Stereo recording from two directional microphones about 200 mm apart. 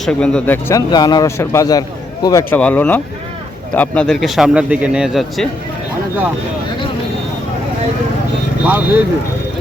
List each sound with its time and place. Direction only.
0.0 s a man's voice: 5° left (ahead or behind)
8.6 s speech: 10° right (ahead or behind)